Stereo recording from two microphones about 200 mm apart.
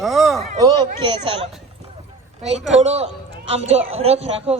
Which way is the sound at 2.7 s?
35° right (ahead or behind).